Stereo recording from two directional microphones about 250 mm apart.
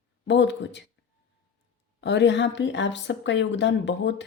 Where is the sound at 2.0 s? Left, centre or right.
Left.